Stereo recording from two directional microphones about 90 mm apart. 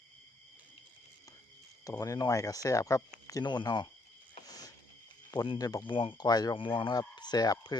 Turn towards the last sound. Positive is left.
turn(degrees=50)  # may be behind; listen again after turning